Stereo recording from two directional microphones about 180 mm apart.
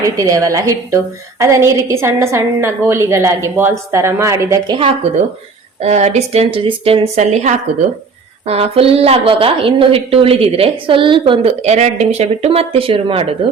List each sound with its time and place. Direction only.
0.0 s a woman's voice: 20° right (ahead or behind)
5.8 s a woman's voice: 40° right (ahead or behind)